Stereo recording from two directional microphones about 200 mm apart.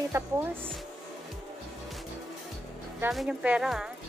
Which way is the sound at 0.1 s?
15° right (ahead or behind).